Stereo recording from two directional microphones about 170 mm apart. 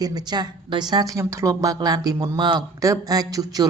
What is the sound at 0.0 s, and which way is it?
A woman's voice, 25° right (ahead or behind).